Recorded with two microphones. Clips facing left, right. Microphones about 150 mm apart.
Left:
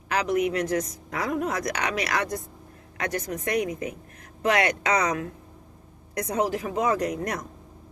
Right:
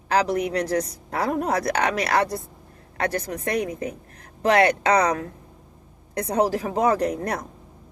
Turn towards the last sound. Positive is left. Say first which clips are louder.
# right 3 dB
turn(degrees=-30)  # may be behind; listen again after turning